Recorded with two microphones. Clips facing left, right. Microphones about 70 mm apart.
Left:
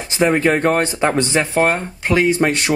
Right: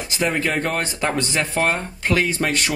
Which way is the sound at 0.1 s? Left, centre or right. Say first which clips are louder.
Left 7 dB; left.